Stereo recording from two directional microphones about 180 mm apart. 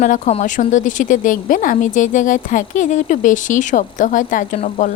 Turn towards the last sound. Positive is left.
turn(degrees=45)  # may be behind; listen again after turning